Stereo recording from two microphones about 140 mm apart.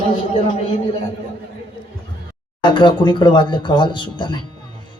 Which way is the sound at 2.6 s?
35° left (ahead or behind).